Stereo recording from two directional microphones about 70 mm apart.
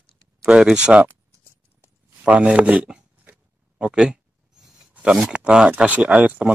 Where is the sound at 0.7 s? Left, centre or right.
Centre.